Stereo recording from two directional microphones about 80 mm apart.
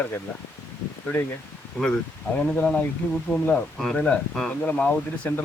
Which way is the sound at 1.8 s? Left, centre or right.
Centre.